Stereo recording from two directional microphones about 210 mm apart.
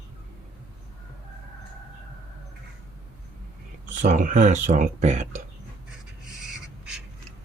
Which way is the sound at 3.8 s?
35° right (ahead or behind).